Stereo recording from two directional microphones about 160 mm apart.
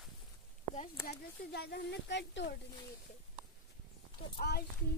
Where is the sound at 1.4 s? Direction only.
90° left.